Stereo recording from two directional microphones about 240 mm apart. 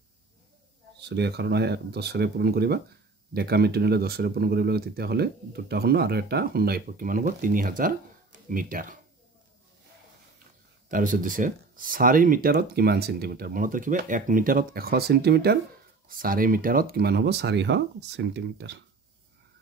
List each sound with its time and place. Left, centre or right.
0.9 s speech: right
10.9 s speech: right